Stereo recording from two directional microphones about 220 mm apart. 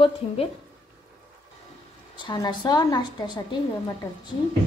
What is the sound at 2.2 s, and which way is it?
A woman's voice, 20° left (ahead or behind).